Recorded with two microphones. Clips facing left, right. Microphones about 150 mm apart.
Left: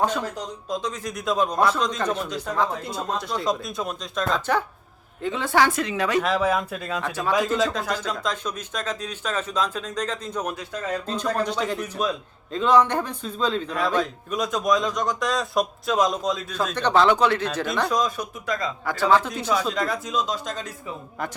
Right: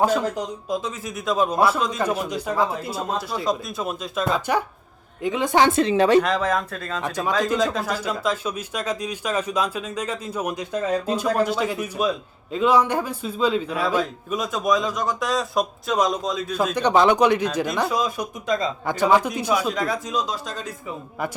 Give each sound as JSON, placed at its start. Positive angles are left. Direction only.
{"t": 0.0, "sound": "a woman's voice", "side_deg": -10}
{"t": 6.2, "sound": "speech", "side_deg": 5}
{"t": 7.0, "sound": "speech", "side_deg": -15}
{"t": 7.7, "sound": "speech", "side_deg": -5}
{"t": 18.4, "sound": "speech", "side_deg": -20}